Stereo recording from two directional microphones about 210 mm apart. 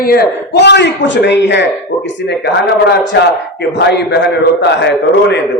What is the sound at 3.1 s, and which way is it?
A man's voice, 50° left (ahead or behind).